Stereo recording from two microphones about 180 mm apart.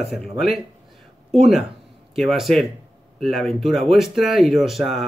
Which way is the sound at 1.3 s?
Centre (ahead or behind).